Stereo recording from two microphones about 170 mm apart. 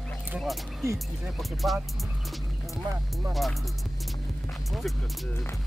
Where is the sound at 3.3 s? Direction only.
Centre (ahead or behind).